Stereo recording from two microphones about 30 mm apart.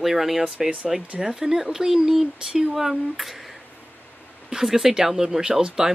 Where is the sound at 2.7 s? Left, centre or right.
Centre.